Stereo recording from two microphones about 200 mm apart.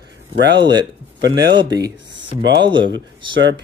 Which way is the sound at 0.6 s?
20° right (ahead or behind).